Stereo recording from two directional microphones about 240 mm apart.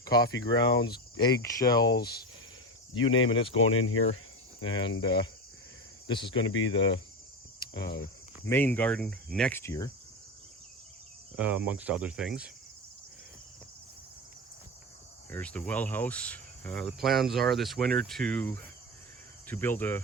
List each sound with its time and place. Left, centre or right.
0.3 s speech: left
1.2 s cricket: centre
3.2 s speech: left
3.5 s speech: left
4.6 s speech: centre
4.9 s cricket: centre
6.1 s speech: centre
6.3 s speech: left
8.4 s cricket: centre
11.3 s speech: centre
15.3 s speech: centre
19.5 s cricket: centre